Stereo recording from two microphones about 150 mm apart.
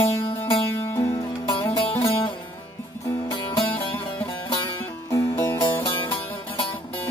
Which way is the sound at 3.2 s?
30° left (ahead or behind).